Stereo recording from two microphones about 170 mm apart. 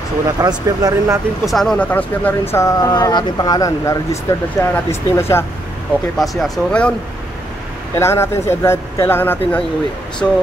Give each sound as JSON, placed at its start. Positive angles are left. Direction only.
{"t": 0.4, "sound": "speech", "side_deg": -20}
{"t": 1.4, "sound": "speech", "side_deg": 0}
{"t": 6.1, "sound": "speech", "side_deg": 0}
{"t": 8.0, "sound": "speech", "side_deg": 15}